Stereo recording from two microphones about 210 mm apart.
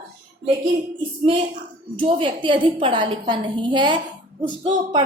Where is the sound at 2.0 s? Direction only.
25° right (ahead or behind).